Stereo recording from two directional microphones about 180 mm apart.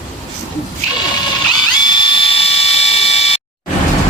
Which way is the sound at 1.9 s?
30° left (ahead or behind).